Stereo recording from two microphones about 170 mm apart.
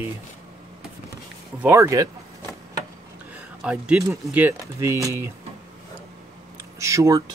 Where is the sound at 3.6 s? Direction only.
5° right (ahead or behind).